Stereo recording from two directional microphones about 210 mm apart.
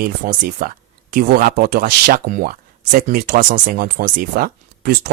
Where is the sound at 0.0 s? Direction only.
40° right (ahead or behind).